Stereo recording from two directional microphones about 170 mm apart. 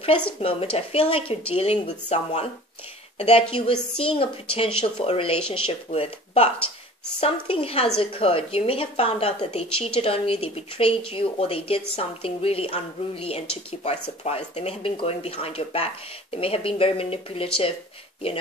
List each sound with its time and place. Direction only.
0.4 s speech: 35° left (ahead or behind)